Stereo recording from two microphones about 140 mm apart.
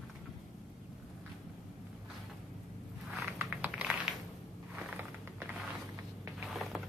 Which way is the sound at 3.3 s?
10° right (ahead or behind).